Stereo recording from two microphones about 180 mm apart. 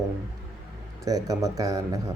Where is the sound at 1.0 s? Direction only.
20° right (ahead or behind).